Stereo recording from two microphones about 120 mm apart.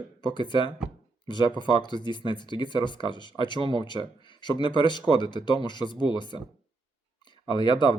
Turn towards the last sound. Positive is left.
turn(degrees=40)  # may be behind; listen again after turning